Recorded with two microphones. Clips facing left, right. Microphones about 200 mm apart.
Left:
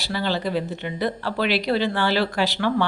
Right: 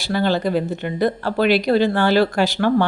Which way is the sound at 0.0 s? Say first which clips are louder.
Right 6 dB; 50° right (ahead or behind).